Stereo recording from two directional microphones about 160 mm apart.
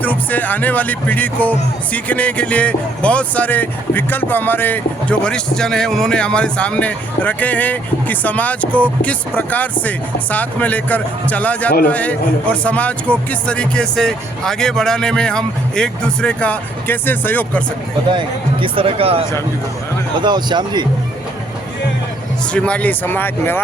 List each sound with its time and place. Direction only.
0.0 s speech: 10° left (ahead or behind)
18.1 s speech: 30° right (ahead or behind)
20.2 s speech: 25° right (ahead or behind)
22.5 s speech: 5° left (ahead or behind)